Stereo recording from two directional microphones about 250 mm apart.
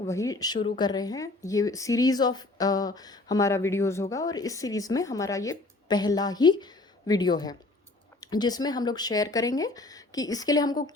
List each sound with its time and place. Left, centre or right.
0.1 s speech: centre